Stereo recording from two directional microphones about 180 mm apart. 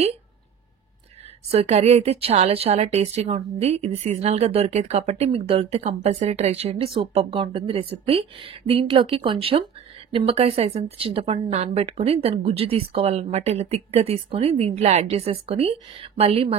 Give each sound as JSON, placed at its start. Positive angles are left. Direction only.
{"t": 1.5, "sound": "a woman's voice", "side_deg": -35}